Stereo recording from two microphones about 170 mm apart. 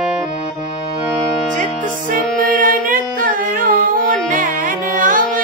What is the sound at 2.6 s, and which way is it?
Music, 55° right (ahead or behind).